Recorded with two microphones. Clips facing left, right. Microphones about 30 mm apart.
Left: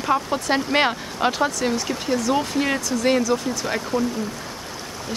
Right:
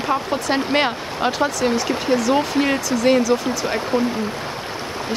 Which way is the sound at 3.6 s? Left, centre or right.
Right.